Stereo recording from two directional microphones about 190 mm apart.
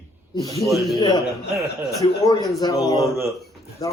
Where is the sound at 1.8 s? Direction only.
20° left (ahead or behind).